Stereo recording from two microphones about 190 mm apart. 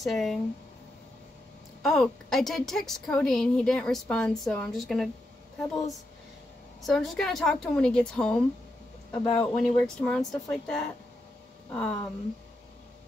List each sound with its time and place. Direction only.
0.0 s a woman's voice: centre (ahead or behind)
1.8 s a woman's voice: centre (ahead or behind)